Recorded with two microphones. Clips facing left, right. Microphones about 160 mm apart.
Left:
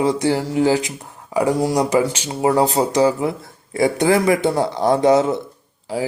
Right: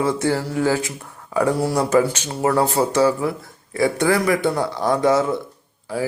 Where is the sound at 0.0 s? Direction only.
15° left (ahead or behind).